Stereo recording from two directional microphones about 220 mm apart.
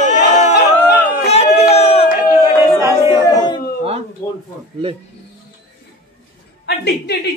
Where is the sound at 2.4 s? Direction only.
15° right (ahead or behind).